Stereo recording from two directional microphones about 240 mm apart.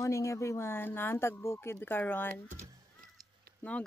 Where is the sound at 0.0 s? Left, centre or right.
Centre.